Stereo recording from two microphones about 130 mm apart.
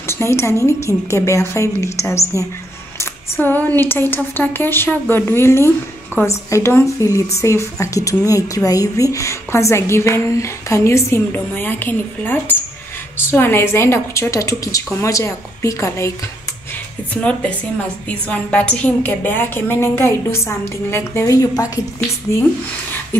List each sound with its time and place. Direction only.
0.0 s a woman's voice: 20° left (ahead or behind)
17.1 s a woman's voice: 10° left (ahead or behind)